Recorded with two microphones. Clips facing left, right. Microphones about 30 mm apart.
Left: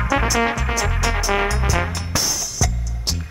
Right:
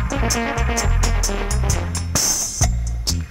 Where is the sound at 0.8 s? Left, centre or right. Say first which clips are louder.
Left 2 dB; centre.